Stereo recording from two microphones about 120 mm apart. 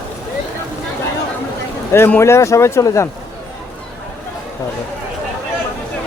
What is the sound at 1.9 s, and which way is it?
Speech, 20° left (ahead or behind).